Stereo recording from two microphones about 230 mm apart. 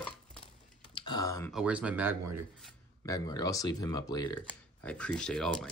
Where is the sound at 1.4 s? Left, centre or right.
Centre.